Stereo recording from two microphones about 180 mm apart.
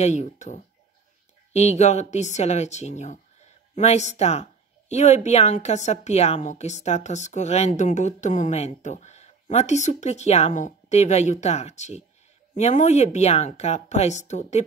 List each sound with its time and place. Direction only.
0.0 s speech: 40° left (ahead or behind)